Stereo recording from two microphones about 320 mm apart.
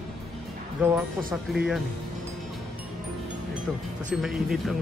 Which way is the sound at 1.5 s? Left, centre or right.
Centre.